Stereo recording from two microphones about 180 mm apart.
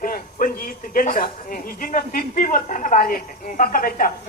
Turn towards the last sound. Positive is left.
turn(degrees=50)  # may be behind; listen again after turning